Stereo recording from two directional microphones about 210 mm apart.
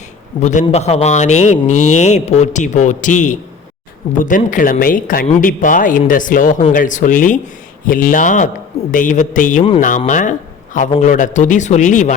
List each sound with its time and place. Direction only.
0.3 s speech: 35° left (ahead or behind)